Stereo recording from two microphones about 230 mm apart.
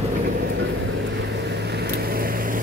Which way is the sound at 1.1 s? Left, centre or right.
Right.